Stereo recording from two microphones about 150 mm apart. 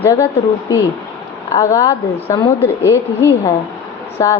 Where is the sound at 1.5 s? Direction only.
20° left (ahead or behind).